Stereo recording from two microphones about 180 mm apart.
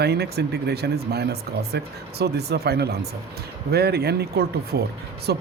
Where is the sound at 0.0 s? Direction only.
65° right (ahead or behind).